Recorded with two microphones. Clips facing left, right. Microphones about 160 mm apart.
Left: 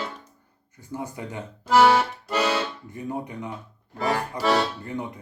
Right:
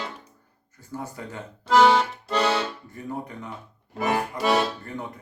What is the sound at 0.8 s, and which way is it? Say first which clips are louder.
Speech: left 2 dB; 15° left (ahead or behind).